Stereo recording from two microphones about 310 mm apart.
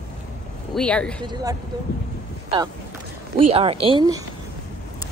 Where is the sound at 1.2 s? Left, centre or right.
Centre.